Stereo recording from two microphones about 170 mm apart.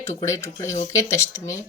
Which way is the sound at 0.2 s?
15° left (ahead or behind).